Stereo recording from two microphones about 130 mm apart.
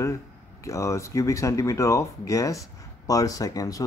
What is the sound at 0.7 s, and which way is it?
Speech, 25° left (ahead or behind).